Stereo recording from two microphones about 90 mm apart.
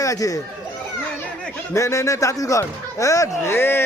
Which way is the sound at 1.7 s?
35° left (ahead or behind).